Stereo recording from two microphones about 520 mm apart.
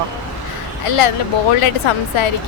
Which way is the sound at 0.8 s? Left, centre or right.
Left.